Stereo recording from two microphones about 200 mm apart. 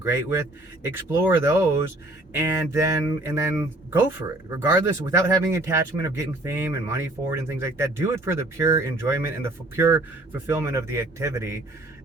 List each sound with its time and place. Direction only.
0.0 s speech: 15° right (ahead or behind)